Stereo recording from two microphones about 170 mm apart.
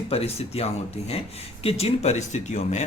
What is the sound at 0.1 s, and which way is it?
Speech, 35° left (ahead or behind).